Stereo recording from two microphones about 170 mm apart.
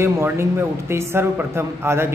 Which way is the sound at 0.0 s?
15° right (ahead or behind).